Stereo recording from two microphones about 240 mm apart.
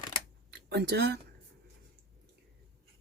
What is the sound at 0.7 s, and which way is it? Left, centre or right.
Speech, right.